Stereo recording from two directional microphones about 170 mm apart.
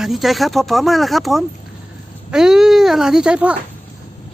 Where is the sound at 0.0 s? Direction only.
Centre (ahead or behind).